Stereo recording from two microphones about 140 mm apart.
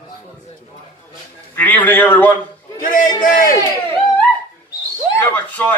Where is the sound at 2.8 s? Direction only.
70° left (ahead or behind).